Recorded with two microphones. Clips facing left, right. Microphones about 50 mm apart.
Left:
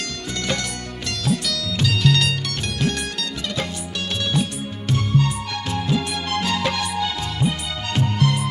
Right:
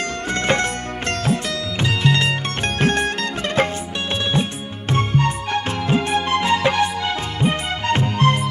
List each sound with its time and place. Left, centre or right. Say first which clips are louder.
0.3 s music: right 7 dB; right